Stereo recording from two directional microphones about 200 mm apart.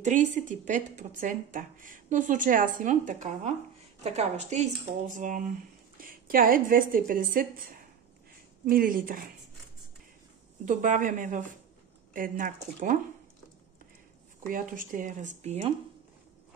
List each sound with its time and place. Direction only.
0.0 s speech: 40° right (ahead or behind)
10.6 s speech: 40° right (ahead or behind)
14.5 s speech: 40° right (ahead or behind)